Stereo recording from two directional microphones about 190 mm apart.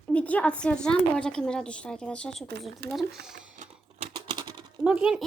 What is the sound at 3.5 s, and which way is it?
Typing, 35° right (ahead or behind).